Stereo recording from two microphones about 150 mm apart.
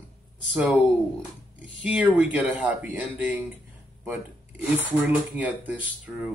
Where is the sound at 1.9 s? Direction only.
5° right (ahead or behind).